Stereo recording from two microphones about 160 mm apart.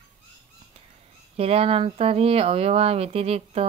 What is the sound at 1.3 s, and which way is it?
Speech, 40° right (ahead or behind).